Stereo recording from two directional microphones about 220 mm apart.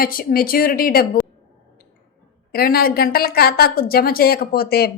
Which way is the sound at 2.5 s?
45° left (ahead or behind).